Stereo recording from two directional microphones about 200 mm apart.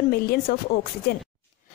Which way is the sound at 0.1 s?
50° left (ahead or behind).